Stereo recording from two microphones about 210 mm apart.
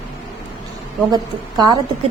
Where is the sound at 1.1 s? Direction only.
20° right (ahead or behind).